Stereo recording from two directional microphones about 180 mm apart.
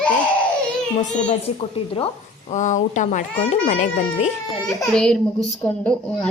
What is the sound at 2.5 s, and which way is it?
A child's voice, 40° left (ahead or behind).